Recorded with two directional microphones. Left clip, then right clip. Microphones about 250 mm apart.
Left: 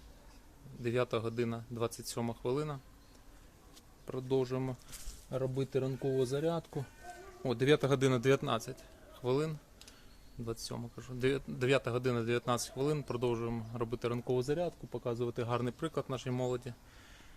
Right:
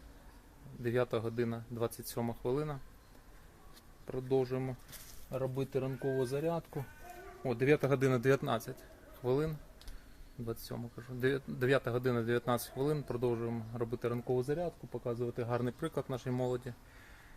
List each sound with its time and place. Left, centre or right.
0.8 s speech: centre
4.0 s speech: centre
5.3 s speech: left
7.4 s speech: centre